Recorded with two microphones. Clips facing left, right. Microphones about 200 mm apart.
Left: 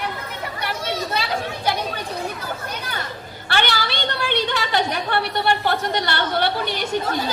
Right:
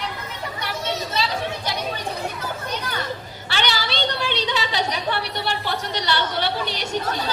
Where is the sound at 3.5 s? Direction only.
55° left (ahead or behind).